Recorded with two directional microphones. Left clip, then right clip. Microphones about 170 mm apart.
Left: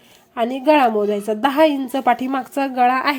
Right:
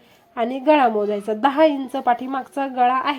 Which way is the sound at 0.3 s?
5° left (ahead or behind).